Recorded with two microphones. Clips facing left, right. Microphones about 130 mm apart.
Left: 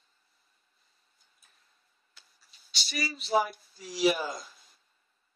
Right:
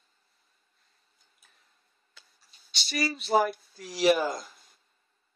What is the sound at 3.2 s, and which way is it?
Speech, 65° right (ahead or behind).